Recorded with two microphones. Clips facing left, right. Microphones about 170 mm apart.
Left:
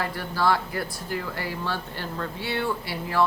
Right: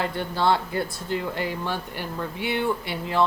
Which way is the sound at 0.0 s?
25° right (ahead or behind).